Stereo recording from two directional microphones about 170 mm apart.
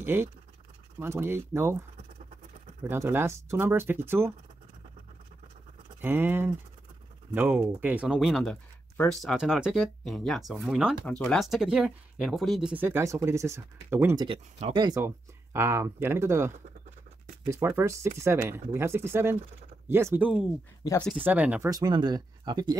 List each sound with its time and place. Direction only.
0.0 s speech: 15° right (ahead or behind)
5.9 s speech: 10° right (ahead or behind)
11.1 s speech: 5° left (ahead or behind); by 14.1 s 15° right (ahead or behind)
14.1 s speech: 30° right (ahead or behind)
15.0 s speech: 15° right (ahead or behind)
21.6 s speech: 25° right (ahead or behind)